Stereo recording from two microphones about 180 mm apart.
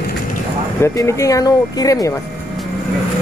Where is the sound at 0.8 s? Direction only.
15° left (ahead or behind).